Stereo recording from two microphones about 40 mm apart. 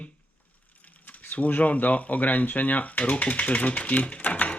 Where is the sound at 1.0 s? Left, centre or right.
Left.